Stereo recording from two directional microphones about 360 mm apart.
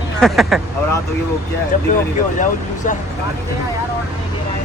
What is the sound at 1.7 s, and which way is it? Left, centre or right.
Speech, left.